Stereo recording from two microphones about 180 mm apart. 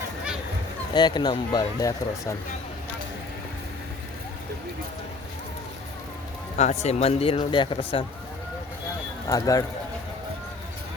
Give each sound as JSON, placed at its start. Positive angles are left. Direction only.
{"t": 0.9, "sound": "speech", "side_deg": 25}
{"t": 6.8, "sound": "speech", "side_deg": 35}
{"t": 9.3, "sound": "speech", "side_deg": 20}